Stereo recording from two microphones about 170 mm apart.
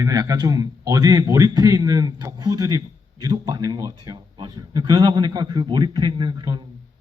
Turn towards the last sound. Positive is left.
turn(degrees=-25)  # may be behind; listen again after turning